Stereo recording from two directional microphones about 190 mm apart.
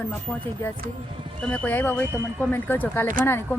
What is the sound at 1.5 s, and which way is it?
Speech, 10° left (ahead or behind).